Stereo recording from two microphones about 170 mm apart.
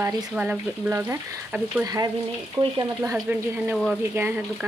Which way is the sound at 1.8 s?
20° right (ahead or behind).